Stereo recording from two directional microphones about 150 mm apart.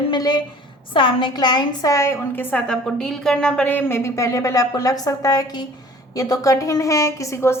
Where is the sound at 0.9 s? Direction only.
30° left (ahead or behind).